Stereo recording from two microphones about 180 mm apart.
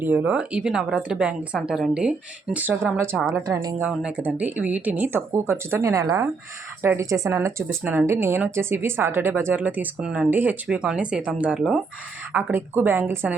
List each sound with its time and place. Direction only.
0.0 s speech: 10° right (ahead or behind)
3.4 s a woman's voice: 20° right (ahead or behind)
3.8 s speech: 5° right (ahead or behind)